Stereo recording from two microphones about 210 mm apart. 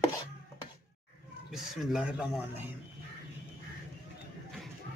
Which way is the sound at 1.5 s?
Centre (ahead or behind).